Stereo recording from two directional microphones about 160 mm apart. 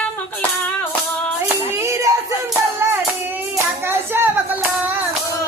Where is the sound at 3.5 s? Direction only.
15° right (ahead or behind).